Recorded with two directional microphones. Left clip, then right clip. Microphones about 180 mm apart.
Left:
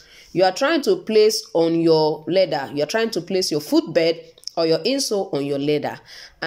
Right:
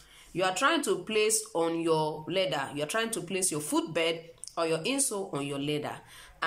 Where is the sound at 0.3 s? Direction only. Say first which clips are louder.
Left 9 dB; 30° left (ahead or behind).